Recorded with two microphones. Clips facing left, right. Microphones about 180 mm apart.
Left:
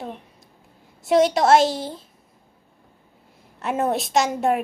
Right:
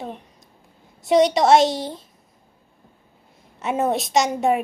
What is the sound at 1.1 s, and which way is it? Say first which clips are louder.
Speech: right 1 dB; centre (ahead or behind).